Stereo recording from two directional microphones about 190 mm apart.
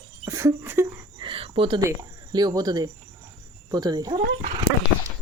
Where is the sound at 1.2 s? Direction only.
30° right (ahead or behind).